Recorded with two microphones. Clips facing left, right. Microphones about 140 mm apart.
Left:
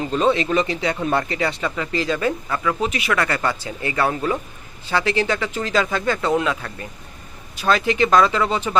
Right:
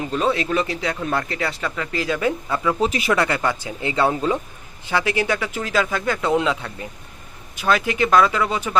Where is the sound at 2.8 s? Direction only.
35° right (ahead or behind).